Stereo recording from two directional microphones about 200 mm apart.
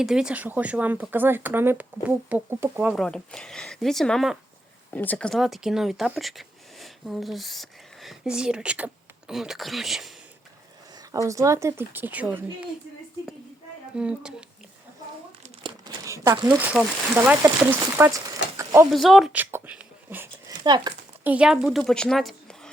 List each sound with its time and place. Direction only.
0.0 s speech: 5° right (ahead or behind)
2.9 s speech: centre (ahead or behind)
11.1 s speech: 15° right (ahead or behind)
13.9 s speech: 5° right (ahead or behind)
15.4 s crumpling: 25° right (ahead or behind)
16.1 s speech: 15° right (ahead or behind)
18.5 s a sound: 15° right (ahead or behind)
18.9 s speech: centre (ahead or behind)
20.7 s speech: 20° right (ahead or behind)
21.2 s a woman's voice: 5° right (ahead or behind)